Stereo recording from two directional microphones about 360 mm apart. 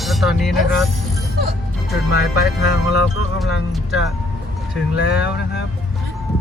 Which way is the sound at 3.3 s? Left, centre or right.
Centre.